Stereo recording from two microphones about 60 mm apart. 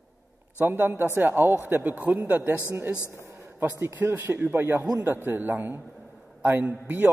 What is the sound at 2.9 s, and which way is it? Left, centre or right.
Speech, left.